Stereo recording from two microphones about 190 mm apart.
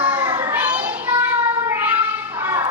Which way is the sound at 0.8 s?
10° right (ahead or behind).